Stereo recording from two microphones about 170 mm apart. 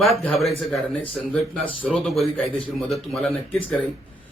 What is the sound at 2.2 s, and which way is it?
Speech, 35° left (ahead or behind).